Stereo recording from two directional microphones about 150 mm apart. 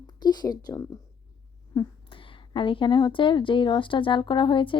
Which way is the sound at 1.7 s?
35° left (ahead or behind).